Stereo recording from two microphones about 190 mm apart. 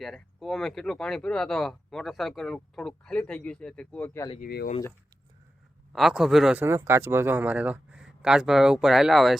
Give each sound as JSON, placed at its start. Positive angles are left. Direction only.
{"t": 0.0, "sound": "speech", "side_deg": 0}
{"t": 4.4, "sound": "speech", "side_deg": 50}
{"t": 5.9, "sound": "speech", "side_deg": 0}